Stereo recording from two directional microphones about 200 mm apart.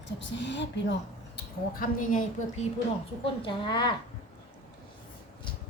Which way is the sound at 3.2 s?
25° left (ahead or behind).